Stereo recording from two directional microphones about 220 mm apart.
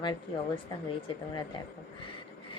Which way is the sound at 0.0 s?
20° left (ahead or behind).